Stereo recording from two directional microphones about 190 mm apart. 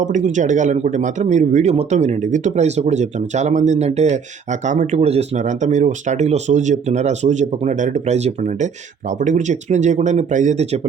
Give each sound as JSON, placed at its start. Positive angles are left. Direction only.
{"t": 0.0, "sound": "speech", "side_deg": -40}